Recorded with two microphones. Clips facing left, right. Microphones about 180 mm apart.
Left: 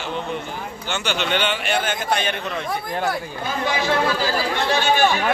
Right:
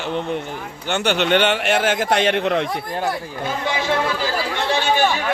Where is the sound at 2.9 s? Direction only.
10° right (ahead or behind).